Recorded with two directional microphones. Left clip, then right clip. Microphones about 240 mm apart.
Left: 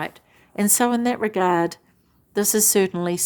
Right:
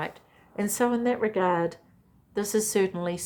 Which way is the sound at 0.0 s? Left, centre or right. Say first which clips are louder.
Left 4 dB; left.